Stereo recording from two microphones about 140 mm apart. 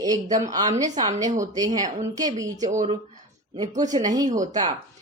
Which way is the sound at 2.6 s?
60° right (ahead or behind).